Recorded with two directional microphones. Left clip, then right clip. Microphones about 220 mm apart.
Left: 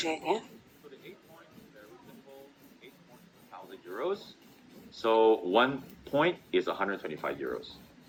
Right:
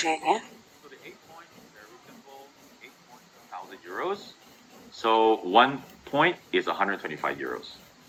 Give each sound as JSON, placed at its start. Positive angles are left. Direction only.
{"t": 0.0, "sound": "speech", "side_deg": -25}
{"t": 3.5, "sound": "a sound", "side_deg": -25}
{"t": 4.9, "sound": "speech", "side_deg": -20}